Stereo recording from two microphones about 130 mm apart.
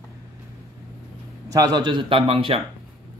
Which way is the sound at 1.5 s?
30° right (ahead or behind).